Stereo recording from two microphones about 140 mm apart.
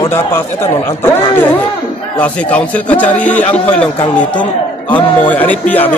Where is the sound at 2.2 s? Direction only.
10° left (ahead or behind).